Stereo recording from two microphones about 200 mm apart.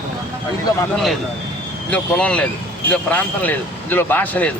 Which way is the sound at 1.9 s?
5° left (ahead or behind).